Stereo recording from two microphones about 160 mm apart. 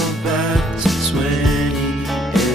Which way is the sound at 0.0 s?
Centre (ahead or behind).